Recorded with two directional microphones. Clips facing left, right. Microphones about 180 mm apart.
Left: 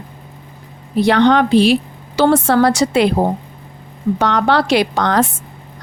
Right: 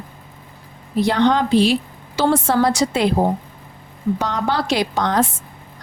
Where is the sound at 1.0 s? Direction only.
70° left (ahead or behind).